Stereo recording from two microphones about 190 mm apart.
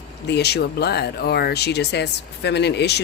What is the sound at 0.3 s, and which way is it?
A woman's voice, 60° left (ahead or behind).